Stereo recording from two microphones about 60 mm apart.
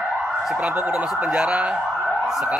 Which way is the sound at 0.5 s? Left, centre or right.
Centre.